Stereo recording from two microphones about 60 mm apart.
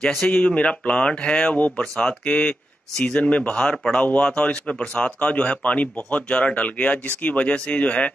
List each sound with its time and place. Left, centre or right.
0.3 s speech: centre
3.7 s speech: centre
4.0 s speech: centre